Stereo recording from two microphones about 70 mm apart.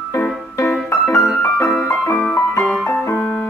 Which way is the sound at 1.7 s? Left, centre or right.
Left.